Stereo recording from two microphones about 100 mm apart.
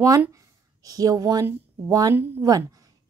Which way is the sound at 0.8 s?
35° right (ahead or behind).